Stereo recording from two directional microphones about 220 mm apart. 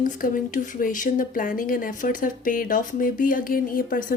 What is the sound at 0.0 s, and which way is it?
Speech, 40° left (ahead or behind).